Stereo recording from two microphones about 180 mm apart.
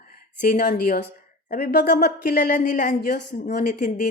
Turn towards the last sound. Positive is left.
turn(degrees=45)  # may be behind; listen again after turning